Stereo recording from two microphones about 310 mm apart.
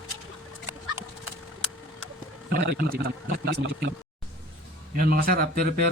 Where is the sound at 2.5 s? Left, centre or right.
Right.